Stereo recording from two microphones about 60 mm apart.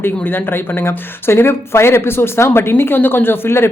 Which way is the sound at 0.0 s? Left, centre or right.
Left.